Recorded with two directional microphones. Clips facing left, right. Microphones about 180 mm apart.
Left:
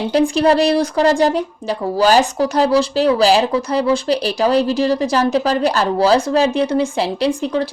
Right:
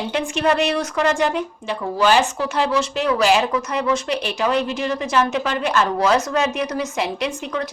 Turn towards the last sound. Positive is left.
turn(degrees=30)  # may be behind; listen again after turning